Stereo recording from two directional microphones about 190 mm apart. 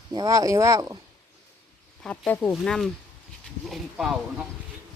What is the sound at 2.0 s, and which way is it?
Speech, 5° left (ahead or behind).